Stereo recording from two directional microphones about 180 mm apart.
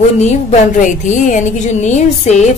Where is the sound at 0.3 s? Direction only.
40° left (ahead or behind).